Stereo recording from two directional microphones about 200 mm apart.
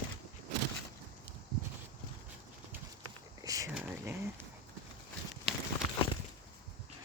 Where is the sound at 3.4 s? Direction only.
15° right (ahead or behind).